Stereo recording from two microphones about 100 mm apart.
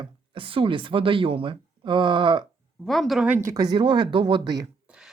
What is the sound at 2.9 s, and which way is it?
Speech, centre (ahead or behind).